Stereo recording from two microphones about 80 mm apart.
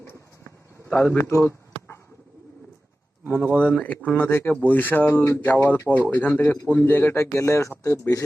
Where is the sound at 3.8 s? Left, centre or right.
Centre.